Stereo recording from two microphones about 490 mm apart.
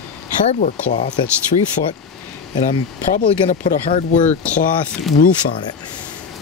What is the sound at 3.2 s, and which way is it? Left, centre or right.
Speech, centre.